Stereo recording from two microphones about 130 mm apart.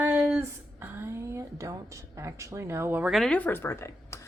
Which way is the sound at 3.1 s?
Centre (ahead or behind).